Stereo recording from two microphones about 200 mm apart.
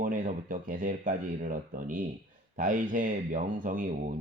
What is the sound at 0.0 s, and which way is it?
Speech, 40° right (ahead or behind).